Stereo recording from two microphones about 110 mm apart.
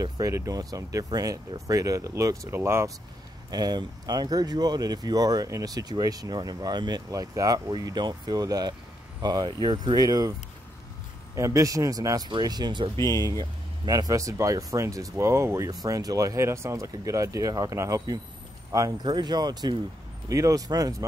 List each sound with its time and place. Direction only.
0.0 s speech: 30° right (ahead or behind)
3.4 s speech: 35° right (ahead or behind)
11.3 s speech: 30° right (ahead or behind)